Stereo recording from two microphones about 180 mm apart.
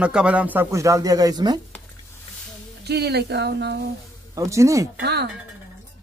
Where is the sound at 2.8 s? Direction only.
65° right (ahead or behind).